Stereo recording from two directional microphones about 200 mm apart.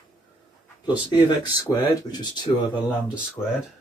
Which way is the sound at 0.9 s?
20° left (ahead or behind).